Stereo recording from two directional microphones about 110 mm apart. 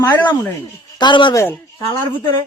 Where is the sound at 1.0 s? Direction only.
45° left (ahead or behind).